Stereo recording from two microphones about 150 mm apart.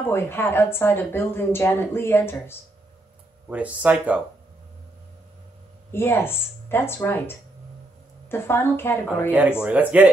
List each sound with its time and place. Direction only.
0.0 s speech: 15° left (ahead or behind)
3.4 s speech: 10° right (ahead or behind)
5.9 s speech: 15° left (ahead or behind)
9.6 s speech: 10° right (ahead or behind)